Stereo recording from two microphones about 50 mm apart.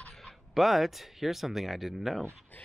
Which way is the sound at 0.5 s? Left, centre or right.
Centre.